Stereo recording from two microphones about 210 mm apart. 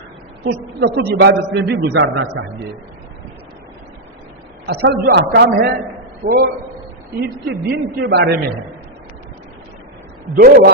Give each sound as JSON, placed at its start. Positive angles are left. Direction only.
{"t": 0.8, "sound": "a man's voice", "side_deg": -55}
{"t": 4.6, "sound": "a man's voice", "side_deg": -50}
{"t": 10.3, "sound": "a man's voice", "side_deg": -45}